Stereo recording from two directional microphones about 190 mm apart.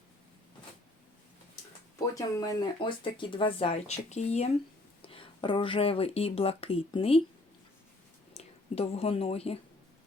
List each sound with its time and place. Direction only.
2.1 s speech: 25° left (ahead or behind)
8.3 s speech: 35° left (ahead or behind)